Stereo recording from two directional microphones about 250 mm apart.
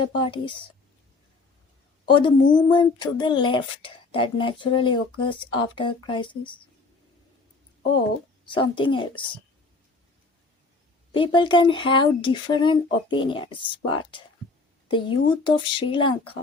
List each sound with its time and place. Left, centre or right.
0.2 s speech: centre
2.0 s speech: centre
8.4 s speech: centre
11.1 s speech: centre